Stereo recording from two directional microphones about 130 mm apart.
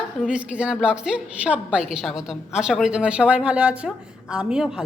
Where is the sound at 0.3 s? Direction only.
10° right (ahead or behind).